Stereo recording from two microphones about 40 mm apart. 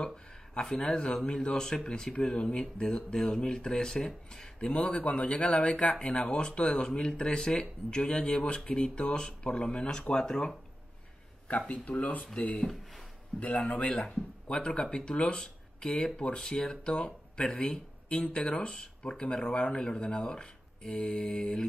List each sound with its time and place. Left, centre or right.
0.0 s speech: centre
11.5 s speech: left
13.4 s speech: left
13.8 s speech: left